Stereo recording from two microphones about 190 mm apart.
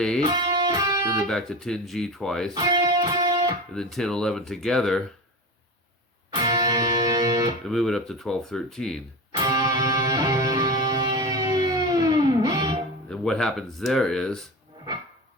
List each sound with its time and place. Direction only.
0.3 s speech: 25° right (ahead or behind)
1.3 s speech: 5° left (ahead or behind)
2.6 s music: 20° right (ahead or behind)
3.8 s speech: centre (ahead or behind)
6.3 s music: 20° right (ahead or behind)
7.7 s speech: centre (ahead or behind)
9.4 s music: 20° right (ahead or behind)
13.1 s speech: 5° left (ahead or behind)